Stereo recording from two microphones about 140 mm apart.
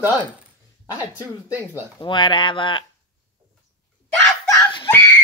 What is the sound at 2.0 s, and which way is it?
Speech, 35° left (ahead or behind).